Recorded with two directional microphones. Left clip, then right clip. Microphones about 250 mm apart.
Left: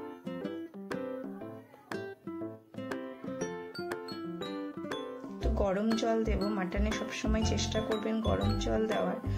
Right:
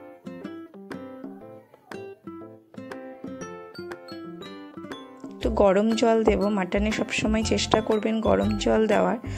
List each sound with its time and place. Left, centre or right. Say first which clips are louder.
0.4 s music: right 1 dB; centre
2.9 s music: right 2 dB; centre
5.4 s speech: right 12 dB; right